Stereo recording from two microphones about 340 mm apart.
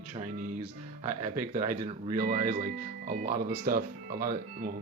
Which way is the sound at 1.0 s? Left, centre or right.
Right.